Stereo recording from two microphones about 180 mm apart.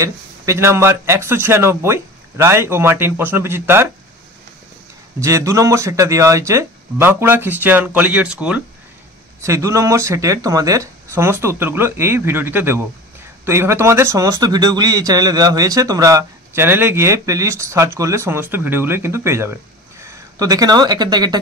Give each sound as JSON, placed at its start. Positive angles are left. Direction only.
{"t": 0.0, "sound": "speech", "side_deg": -15}
{"t": 5.2, "sound": "speech", "side_deg": -15}